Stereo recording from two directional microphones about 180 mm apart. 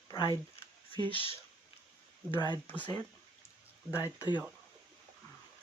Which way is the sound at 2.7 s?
10° left (ahead or behind).